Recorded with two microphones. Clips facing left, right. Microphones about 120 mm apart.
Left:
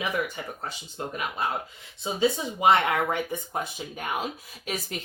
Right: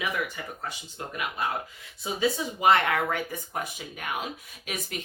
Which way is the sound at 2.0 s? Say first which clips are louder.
Left 2 dB; 25° left (ahead or behind).